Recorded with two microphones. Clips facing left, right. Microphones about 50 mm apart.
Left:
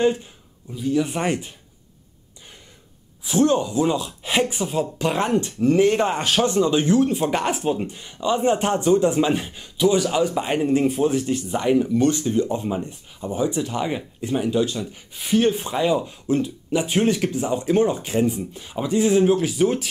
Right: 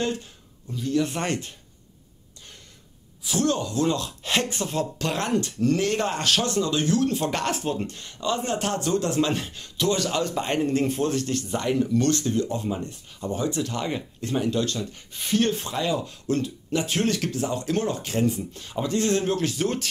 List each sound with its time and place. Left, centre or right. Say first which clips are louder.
0.0 s speech: left 8 dB; centre
3.3 s speech: left 6 dB; centre